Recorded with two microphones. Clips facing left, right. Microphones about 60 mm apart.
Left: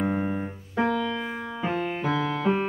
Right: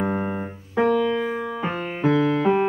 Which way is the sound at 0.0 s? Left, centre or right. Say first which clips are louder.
Right 2 dB; right.